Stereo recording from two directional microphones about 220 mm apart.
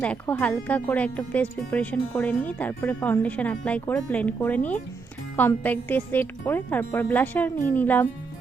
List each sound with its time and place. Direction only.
0.0 s speech: 5° left (ahead or behind)